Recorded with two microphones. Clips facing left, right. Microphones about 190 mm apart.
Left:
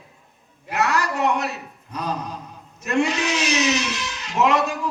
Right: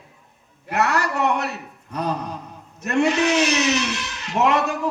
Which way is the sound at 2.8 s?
60° right (ahead or behind).